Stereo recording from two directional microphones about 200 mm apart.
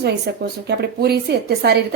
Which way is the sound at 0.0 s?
55° right (ahead or behind).